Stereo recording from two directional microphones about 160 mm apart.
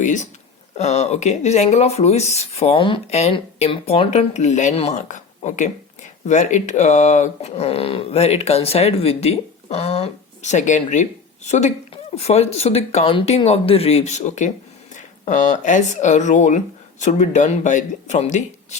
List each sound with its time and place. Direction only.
0.0 s speech: 50° left (ahead or behind)